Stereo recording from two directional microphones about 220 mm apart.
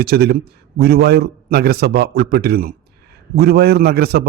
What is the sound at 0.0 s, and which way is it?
A man's voice, 45° right (ahead or behind).